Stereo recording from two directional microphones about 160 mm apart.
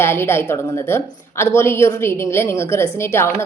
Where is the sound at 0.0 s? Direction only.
15° left (ahead or behind).